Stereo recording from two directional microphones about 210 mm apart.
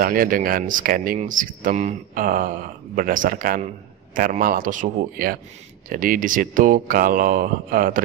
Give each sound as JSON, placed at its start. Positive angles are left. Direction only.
{"t": 0.0, "sound": "speech", "side_deg": -40}